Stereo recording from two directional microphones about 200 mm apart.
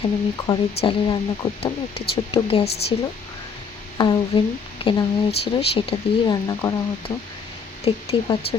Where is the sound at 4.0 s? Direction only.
20° left (ahead or behind).